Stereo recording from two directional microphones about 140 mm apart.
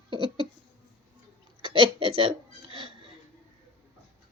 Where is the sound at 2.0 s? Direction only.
40° right (ahead or behind).